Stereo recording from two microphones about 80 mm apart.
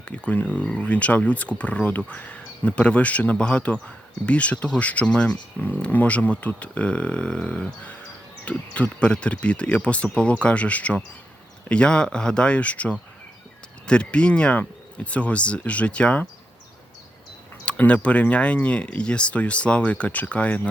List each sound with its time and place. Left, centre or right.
0.0 s speech: centre
17.7 s speech: centre